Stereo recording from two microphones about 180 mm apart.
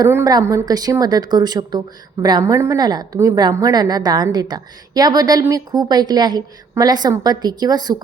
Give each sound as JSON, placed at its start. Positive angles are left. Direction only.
{"t": 0.0, "sound": "a woman's voice", "side_deg": -15}